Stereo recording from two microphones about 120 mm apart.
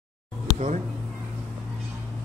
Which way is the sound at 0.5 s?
70° right (ahead or behind).